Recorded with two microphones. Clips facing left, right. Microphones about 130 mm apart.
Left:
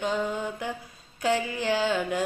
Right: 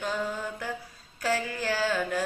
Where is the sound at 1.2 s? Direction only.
15° left (ahead or behind).